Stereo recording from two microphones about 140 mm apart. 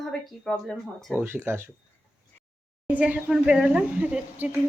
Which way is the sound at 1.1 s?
15° right (ahead or behind).